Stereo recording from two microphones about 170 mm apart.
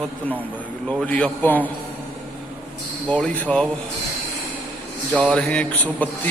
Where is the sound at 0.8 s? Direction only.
5° left (ahead or behind).